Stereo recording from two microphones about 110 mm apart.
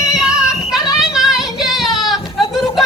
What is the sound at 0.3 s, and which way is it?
Child singing, 5° right (ahead or behind).